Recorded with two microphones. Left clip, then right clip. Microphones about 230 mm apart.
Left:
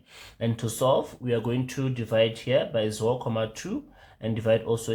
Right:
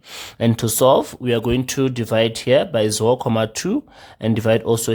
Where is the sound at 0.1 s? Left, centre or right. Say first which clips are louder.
Right 10 dB; right.